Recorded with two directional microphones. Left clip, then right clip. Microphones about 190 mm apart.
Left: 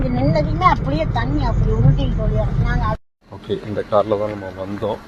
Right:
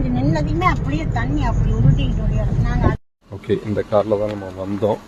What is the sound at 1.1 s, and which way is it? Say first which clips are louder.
Speech: left 1 dB; 5° right (ahead or behind).